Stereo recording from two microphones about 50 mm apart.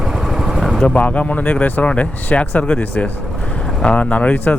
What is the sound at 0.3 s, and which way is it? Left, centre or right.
Vehicle, centre.